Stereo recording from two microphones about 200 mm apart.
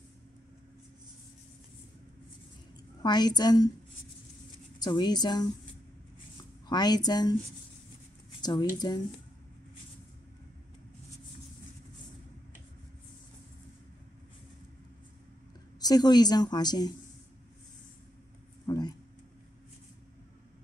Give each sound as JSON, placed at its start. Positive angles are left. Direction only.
{"t": 3.0, "sound": "a woman's voice", "side_deg": 20}
{"t": 4.7, "sound": "a woman's voice", "side_deg": 20}
{"t": 6.7, "sound": "a woman's voice", "side_deg": 20}
{"t": 8.4, "sound": "a woman's voice", "side_deg": 20}
{"t": 15.8, "sound": "a woman's voice", "side_deg": 20}
{"t": 18.7, "sound": "a sound", "side_deg": 20}